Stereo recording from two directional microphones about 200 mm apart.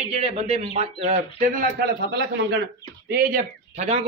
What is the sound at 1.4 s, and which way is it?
Speech, 45° right (ahead or behind).